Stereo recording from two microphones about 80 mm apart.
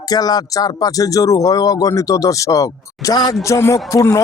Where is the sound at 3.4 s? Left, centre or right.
Left.